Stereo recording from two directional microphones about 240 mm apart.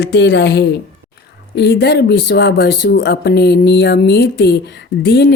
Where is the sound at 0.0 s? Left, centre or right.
Left.